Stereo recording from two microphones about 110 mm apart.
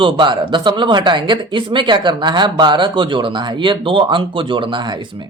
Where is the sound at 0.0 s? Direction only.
45° right (ahead or behind).